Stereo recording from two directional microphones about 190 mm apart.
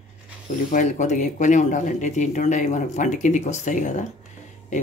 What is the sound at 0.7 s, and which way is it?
Speech, 40° left (ahead or behind).